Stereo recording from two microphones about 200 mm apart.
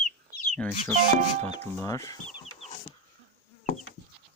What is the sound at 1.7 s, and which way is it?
Speech, 15° left (ahead or behind).